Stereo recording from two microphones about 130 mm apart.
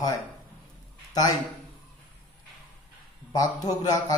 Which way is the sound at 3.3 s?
30° left (ahead or behind).